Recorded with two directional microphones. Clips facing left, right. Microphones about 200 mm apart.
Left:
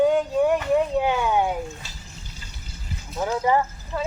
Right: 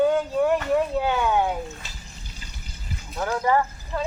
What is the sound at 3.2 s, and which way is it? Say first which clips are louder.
Speech: left 1 dB; 15° left (ahead or behind).